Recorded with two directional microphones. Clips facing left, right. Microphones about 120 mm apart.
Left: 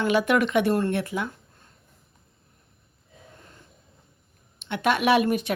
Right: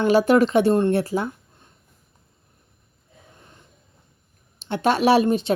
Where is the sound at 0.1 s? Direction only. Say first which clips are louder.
Right 6 dB; 35° right (ahead or behind).